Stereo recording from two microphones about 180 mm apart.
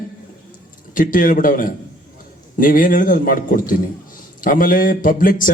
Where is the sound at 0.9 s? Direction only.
50° left (ahead or behind).